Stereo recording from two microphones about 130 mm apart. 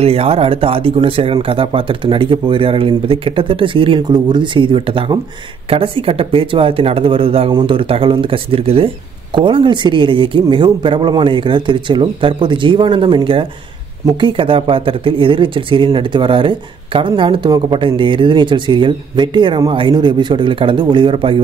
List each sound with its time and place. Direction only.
0.0 s speech: 50° right (ahead or behind)